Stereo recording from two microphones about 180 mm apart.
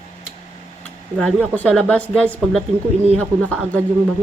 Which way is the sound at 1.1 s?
5° left (ahead or behind).